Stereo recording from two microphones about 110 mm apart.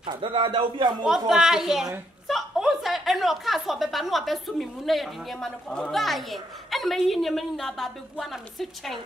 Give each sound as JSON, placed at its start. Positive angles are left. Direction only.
{"t": 0.0, "sound": "speech", "side_deg": -50}
{"t": 1.0, "sound": "a woman's voice", "side_deg": -5}